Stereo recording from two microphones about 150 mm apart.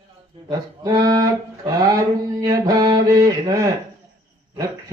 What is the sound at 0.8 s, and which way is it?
Music, 25° right (ahead or behind).